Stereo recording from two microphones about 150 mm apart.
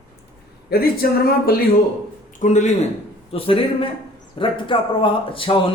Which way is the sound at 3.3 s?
40° left (ahead or behind).